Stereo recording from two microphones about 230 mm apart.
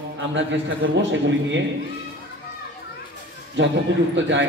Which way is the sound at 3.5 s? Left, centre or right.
Right.